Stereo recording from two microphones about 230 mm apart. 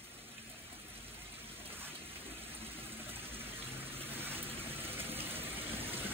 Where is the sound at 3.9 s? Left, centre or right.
Centre.